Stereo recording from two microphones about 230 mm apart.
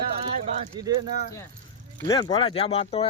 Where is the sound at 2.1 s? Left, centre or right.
Left.